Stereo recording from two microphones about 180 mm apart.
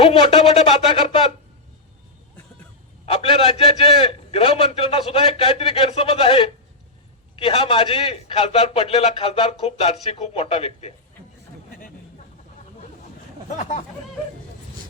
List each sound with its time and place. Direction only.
0.0 s a man's voice: 30° left (ahead or behind)
3.1 s a man's voice: 30° left (ahead or behind)
13.6 s speech: 40° left (ahead or behind)